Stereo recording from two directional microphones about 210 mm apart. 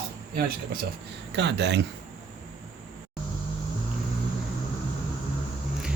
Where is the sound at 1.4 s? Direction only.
55° right (ahead or behind).